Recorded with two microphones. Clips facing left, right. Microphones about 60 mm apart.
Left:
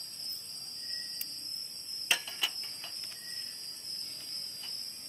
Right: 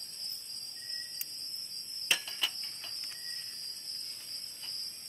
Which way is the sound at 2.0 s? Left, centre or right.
Centre.